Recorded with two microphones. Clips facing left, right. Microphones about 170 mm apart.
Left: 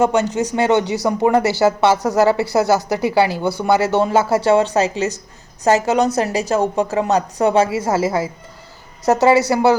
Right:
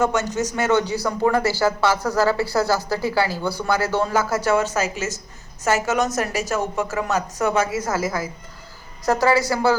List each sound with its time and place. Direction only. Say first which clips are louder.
0.1 s speech: left 5 dB; 15° left (ahead or behind)
0.4 s a woman's voice: left 4 dB; 25° left (ahead or behind)